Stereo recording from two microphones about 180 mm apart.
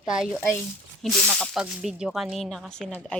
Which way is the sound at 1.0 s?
Centre (ahead or behind).